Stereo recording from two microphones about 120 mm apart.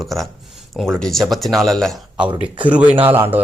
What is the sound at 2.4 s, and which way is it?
Speech, 10° right (ahead or behind).